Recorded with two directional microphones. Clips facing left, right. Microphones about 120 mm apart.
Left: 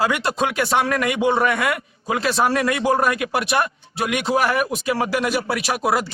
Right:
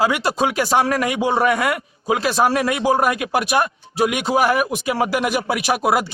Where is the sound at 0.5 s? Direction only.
30° right (ahead or behind).